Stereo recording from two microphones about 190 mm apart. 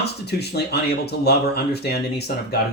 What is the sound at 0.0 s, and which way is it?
Speech, 60° left (ahead or behind).